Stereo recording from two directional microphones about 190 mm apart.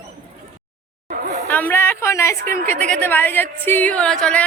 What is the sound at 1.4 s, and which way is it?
A woman's voice, 10° left (ahead or behind).